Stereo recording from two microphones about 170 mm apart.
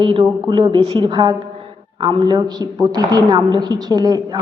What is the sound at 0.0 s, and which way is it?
A woman's voice, 30° right (ahead or behind).